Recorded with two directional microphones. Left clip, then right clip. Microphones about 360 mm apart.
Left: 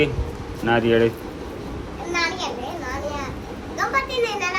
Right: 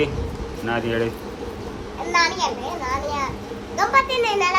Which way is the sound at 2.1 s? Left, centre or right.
Centre.